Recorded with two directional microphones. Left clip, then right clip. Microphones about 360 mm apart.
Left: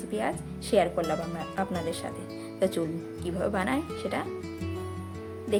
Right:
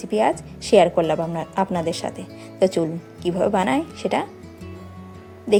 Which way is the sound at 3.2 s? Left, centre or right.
Centre.